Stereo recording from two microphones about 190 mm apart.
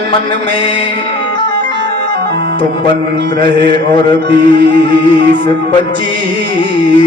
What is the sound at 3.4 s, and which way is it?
Mantra, 25° left (ahead or behind).